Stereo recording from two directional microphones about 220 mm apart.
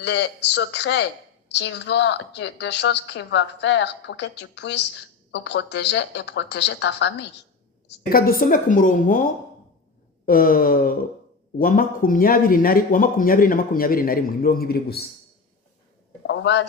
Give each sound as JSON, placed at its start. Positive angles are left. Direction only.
{"t": 0.0, "sound": "a woman's voice", "side_deg": 50}
{"t": 7.9, "sound": "a man's voice", "side_deg": 40}
{"t": 16.2, "sound": "a man's voice", "side_deg": 55}